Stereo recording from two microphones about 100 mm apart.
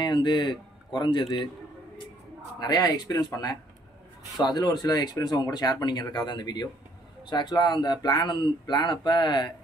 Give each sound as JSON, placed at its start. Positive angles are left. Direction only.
{"t": 0.0, "sound": "speech", "side_deg": 50}
{"t": 2.6, "sound": "speech", "side_deg": 40}